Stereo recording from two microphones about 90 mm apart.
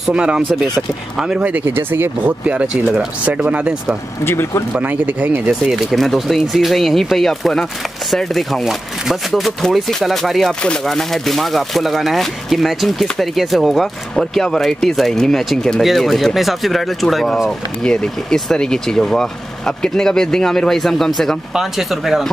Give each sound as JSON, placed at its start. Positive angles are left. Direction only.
{"t": 0.0, "sound": "speech", "side_deg": -10}
{"t": 4.2, "sound": "speech", "side_deg": 25}
{"t": 4.7, "sound": "speech", "side_deg": -15}
{"t": 5.7, "sound": "speech", "side_deg": 0}